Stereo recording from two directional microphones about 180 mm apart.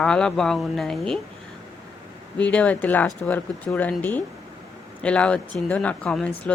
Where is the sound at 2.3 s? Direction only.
5° left (ahead or behind).